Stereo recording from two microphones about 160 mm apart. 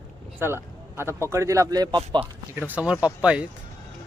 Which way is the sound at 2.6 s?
10° right (ahead or behind).